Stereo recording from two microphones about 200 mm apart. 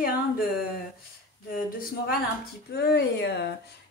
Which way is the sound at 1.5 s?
45° left (ahead or behind).